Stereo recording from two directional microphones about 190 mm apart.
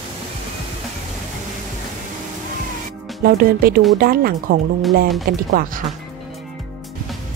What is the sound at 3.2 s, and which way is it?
Speech, 50° right (ahead or behind).